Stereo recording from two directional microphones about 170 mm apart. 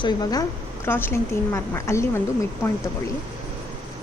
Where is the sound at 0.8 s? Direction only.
15° left (ahead or behind).